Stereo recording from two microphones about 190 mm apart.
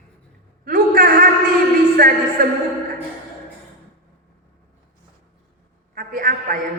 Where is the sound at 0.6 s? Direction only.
45° right (ahead or behind).